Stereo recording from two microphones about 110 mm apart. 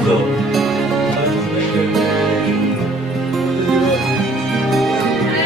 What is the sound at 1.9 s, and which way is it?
Music, centre (ahead or behind).